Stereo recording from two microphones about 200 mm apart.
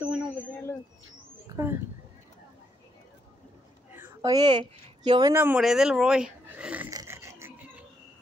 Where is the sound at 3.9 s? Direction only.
10° right (ahead or behind).